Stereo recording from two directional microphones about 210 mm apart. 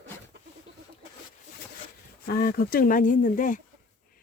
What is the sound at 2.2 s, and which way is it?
Speech, 45° left (ahead or behind).